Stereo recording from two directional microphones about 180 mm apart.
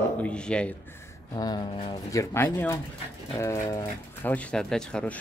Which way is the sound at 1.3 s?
20° left (ahead or behind).